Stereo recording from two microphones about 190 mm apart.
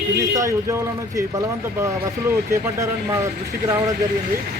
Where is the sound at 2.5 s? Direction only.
15° right (ahead or behind).